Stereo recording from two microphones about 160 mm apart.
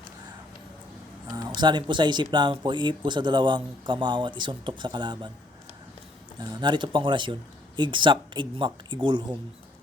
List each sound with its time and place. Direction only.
1.3 s speech: 25° right (ahead or behind)
6.4 s speech: 25° right (ahead or behind)